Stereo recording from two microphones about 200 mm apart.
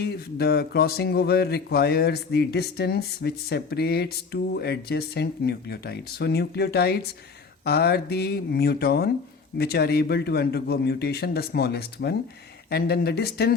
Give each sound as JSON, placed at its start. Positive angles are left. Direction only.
{"t": 0.0, "sound": "speech", "side_deg": 55}